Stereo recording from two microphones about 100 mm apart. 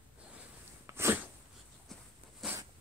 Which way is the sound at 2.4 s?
5° right (ahead or behind).